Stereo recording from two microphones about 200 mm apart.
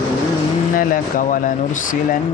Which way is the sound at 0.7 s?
40° left (ahead or behind).